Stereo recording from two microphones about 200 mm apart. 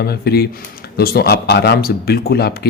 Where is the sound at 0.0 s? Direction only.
50° left (ahead or behind).